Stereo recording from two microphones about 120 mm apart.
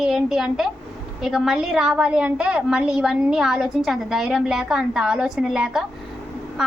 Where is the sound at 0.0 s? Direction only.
5° right (ahead or behind).